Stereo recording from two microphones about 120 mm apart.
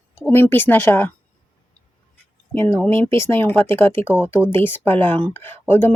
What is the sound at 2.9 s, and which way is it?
Speech, 20° left (ahead or behind).